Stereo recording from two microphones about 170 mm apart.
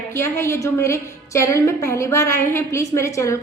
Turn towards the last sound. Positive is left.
turn(degrees=15)  # may be behind; listen again after turning